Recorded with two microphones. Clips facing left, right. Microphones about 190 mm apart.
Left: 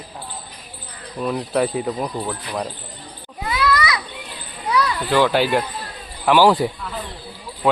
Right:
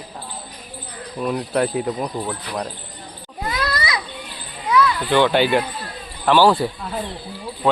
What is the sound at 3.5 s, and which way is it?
Children playing, 40° right (ahead or behind).